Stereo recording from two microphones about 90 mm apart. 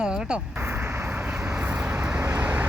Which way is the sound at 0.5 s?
25° right (ahead or behind).